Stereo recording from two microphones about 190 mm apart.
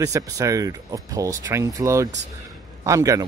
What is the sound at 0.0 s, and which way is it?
Speech, 15° right (ahead or behind).